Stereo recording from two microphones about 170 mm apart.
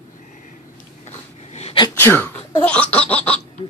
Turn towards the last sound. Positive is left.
turn(degrees=10)  # may be behind; listen again after turning